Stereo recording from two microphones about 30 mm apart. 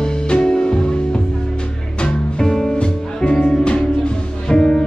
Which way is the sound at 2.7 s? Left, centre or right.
Left.